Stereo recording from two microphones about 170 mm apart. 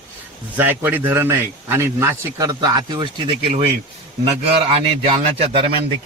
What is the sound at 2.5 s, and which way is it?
A man's voice, 25° right (ahead or behind).